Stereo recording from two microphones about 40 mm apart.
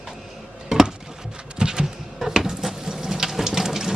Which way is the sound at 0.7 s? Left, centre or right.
Centre.